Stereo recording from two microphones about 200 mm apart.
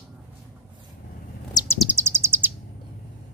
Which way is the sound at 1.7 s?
10° right (ahead or behind).